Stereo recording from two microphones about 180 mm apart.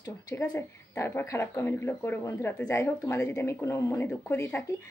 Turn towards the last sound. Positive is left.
turn(degrees=10)  # may be behind; listen again after turning